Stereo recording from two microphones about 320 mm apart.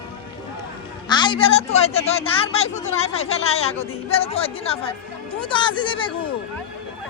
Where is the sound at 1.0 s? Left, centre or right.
Centre.